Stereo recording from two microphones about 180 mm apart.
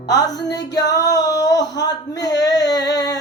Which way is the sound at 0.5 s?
75° left (ahead or behind).